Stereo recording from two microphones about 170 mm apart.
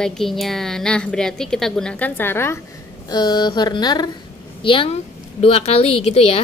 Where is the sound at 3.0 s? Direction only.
25° left (ahead or behind).